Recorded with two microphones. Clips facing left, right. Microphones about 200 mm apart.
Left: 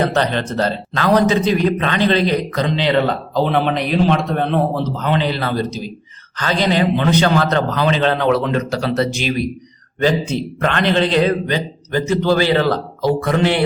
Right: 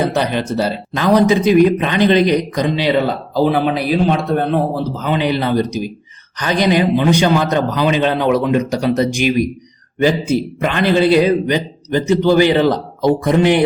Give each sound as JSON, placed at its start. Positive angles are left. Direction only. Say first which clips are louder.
{"t": 0.0, "sound": "speech", "louder": "right 1 dB", "side_deg": -10}